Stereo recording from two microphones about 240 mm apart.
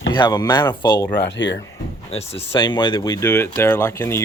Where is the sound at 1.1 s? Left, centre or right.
Left.